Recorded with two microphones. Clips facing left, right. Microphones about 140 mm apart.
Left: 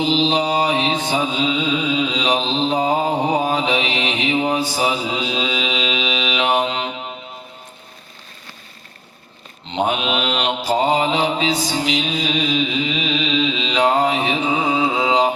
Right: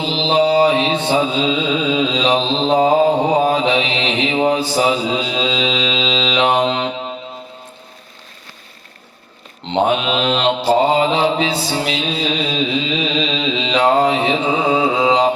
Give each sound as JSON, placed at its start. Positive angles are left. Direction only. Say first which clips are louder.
{"t": 0.0, "sound": "mantra", "louder": "right 2 dB", "side_deg": -30}
{"t": 10.1, "sound": "mantra", "louder": "right 4 dB", "side_deg": -30}
{"t": 11.9, "sound": "music", "louder": "right 1 dB", "side_deg": -30}